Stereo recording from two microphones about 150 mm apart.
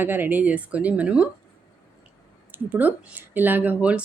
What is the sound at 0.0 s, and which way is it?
Speech, 15° right (ahead or behind).